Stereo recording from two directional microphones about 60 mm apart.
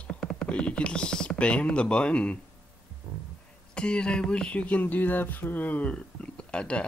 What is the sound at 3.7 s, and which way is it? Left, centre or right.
Speech, centre.